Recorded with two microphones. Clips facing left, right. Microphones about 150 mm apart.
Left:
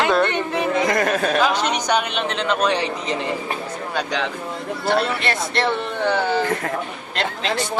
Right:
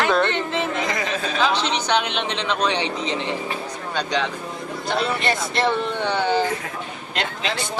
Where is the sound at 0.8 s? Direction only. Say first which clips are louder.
Left 6 dB; 55° left (ahead or behind).